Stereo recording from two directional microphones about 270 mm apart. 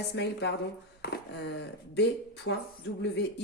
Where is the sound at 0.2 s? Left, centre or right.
Left.